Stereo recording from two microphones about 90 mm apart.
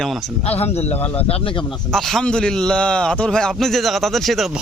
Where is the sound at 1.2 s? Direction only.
90° left.